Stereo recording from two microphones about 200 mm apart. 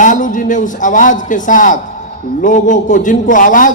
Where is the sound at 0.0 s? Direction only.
40° left (ahead or behind).